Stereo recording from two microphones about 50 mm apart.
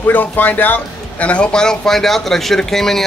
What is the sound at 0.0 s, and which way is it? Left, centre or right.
A man's voice, left.